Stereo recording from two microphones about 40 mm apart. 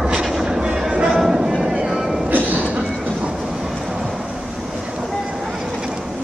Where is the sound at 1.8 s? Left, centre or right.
Centre.